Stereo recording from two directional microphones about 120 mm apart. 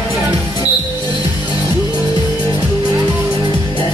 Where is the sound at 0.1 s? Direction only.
35° left (ahead or behind).